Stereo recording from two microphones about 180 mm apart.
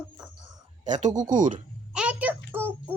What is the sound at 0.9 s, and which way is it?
Speech, 40° right (ahead or behind).